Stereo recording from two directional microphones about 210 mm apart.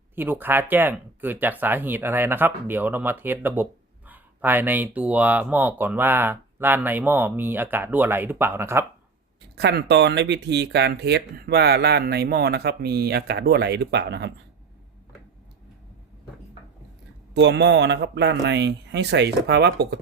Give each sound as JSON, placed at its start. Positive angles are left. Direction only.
{"t": 0.2, "sound": "speech", "side_deg": -10}
{"t": 9.6, "sound": "speech", "side_deg": -50}
{"t": 17.3, "sound": "speech", "side_deg": -55}